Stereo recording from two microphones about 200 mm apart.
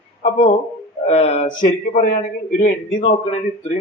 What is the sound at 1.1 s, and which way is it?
Speech, 30° left (ahead or behind).